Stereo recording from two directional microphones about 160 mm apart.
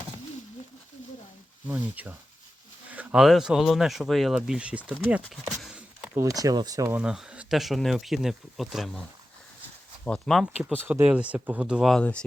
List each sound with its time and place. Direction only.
1.6 s speech: 10° right (ahead or behind)
5.1 s a sound: centre (ahead or behind)
6.1 s speech: 20° right (ahead or behind)
7.0 s speech: 5° right (ahead or behind)
10.8 s speech: 10° right (ahead or behind)